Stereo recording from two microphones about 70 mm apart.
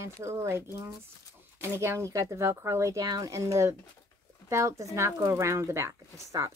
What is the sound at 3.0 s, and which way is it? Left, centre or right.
Speech, right.